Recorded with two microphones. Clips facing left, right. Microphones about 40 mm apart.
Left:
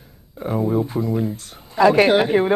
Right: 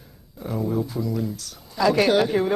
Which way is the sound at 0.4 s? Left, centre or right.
Left.